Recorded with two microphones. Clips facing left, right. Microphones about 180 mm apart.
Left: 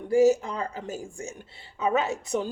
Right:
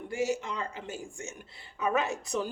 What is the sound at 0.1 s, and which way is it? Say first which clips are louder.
Speech: left 11 dB; 35° left (ahead or behind).